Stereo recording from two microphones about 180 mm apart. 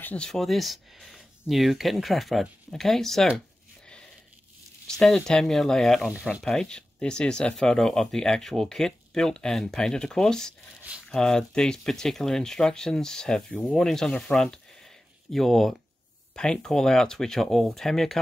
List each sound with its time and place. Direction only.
0.0 s speech: 5° left (ahead or behind)
4.8 s speech: 5° left (ahead or behind)